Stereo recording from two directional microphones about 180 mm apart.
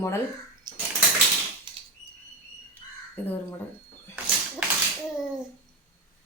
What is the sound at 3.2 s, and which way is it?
Speech, 10° left (ahead or behind).